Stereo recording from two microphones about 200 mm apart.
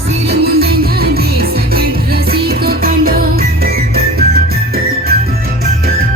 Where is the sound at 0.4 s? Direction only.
50° right (ahead or behind).